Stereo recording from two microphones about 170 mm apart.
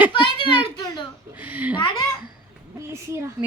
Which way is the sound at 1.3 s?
10° right (ahead or behind).